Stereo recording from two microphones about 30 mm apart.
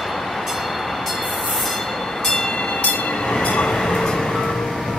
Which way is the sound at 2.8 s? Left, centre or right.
Left.